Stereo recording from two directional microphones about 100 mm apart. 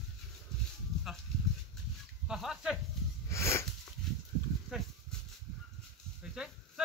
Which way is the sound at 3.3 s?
25° left (ahead or behind).